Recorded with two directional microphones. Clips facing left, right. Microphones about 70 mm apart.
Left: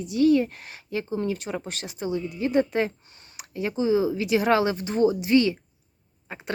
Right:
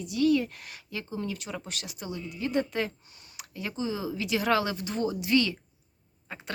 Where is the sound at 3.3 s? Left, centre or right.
Left.